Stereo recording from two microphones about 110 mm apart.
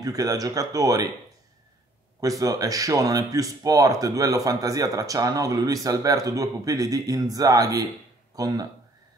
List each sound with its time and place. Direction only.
0.0 s speech: 35° right (ahead or behind)
2.1 s speech: 30° right (ahead or behind)